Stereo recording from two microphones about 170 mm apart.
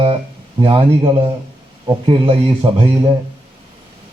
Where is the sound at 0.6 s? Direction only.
30° right (ahead or behind).